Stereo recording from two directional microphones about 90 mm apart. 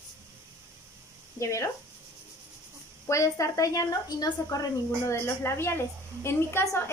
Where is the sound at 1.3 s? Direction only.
35° left (ahead or behind).